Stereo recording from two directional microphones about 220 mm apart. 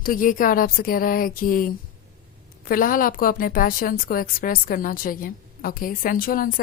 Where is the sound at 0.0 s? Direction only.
40° left (ahead or behind).